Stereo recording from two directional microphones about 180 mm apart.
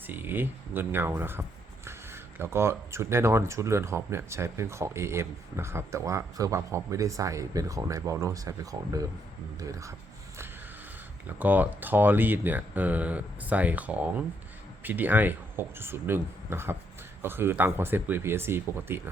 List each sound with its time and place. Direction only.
0.1 s speech: 10° right (ahead or behind)
11.3 s speech: 10° right (ahead or behind)